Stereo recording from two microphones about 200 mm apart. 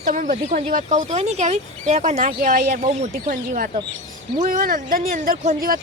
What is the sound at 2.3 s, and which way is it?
Speech, 45° right (ahead or behind).